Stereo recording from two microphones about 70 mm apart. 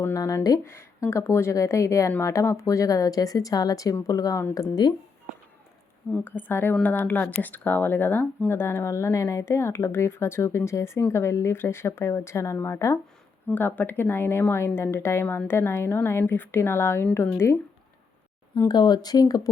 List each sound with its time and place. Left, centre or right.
0.6 s a woman's voice: left
6.2 s speech: left
13.5 s speech: left
18.7 s speech: left